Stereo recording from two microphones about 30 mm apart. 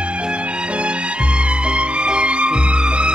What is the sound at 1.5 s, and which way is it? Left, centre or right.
Music, right.